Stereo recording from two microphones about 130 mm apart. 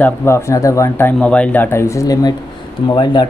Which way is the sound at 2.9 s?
35° left (ahead or behind).